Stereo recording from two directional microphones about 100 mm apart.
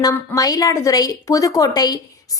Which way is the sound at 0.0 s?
40° left (ahead or behind).